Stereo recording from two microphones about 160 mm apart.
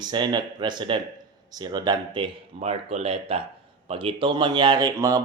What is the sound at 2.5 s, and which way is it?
Speech, 40° right (ahead or behind).